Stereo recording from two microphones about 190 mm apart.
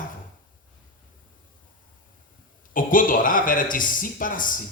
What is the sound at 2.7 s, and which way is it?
Speech, 45° left (ahead or behind).